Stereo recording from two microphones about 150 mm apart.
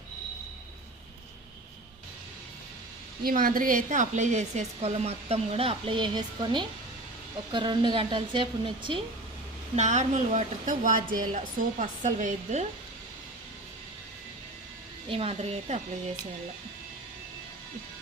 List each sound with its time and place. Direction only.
3.2 s a woman's voice: 70° right (ahead or behind); by 9.0 s 35° right (ahead or behind)
9.7 s a woman's voice: 50° right (ahead or behind)
15.1 s a woman's voice: 40° right (ahead or behind)